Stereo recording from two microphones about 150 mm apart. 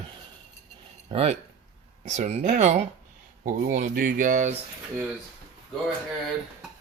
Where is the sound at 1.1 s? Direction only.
40° right (ahead or behind).